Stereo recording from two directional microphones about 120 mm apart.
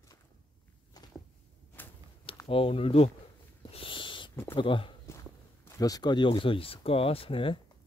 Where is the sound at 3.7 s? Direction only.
45° left (ahead or behind).